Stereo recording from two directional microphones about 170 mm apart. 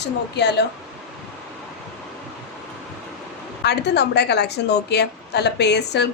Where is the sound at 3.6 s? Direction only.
80° left.